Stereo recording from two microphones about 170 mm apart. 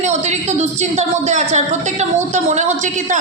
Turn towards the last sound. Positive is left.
turn(degrees=-45)  # may be behind; listen again after turning